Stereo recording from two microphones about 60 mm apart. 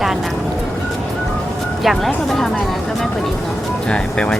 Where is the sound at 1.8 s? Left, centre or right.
Centre.